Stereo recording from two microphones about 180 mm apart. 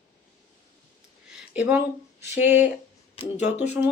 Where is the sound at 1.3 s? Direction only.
10° right (ahead or behind).